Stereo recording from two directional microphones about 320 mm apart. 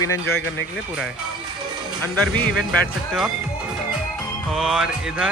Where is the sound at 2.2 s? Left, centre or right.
Centre.